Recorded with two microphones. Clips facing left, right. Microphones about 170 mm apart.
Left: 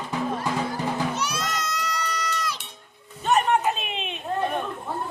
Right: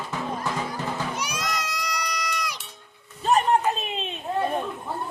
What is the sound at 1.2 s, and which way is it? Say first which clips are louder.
Music: left 1 dB; 10° right (ahead or behind).